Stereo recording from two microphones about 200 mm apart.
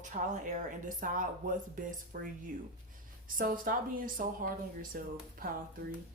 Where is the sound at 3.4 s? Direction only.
45° right (ahead or behind).